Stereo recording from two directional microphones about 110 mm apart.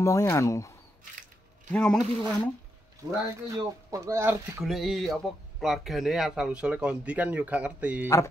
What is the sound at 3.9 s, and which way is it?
Speech, 25° right (ahead or behind).